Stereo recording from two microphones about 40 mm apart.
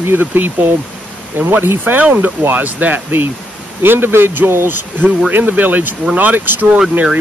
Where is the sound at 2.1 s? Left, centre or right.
Right.